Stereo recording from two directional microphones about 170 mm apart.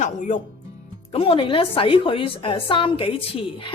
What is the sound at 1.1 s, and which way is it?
A woman's voice, 30° left (ahead or behind).